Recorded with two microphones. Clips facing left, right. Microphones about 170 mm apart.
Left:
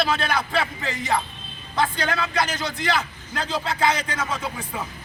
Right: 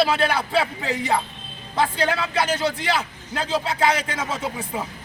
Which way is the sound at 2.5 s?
30° right (ahead or behind).